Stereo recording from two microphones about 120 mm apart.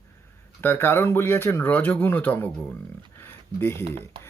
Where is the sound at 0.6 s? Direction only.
20° left (ahead or behind).